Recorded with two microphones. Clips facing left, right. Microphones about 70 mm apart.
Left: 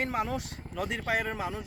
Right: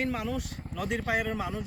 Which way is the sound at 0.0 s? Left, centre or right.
Left.